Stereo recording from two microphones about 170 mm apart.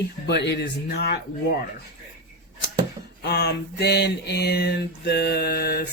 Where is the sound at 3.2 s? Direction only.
70° left (ahead or behind).